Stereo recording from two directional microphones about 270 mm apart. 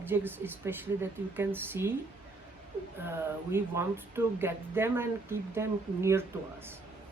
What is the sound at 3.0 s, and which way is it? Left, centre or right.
A woman's voice, centre.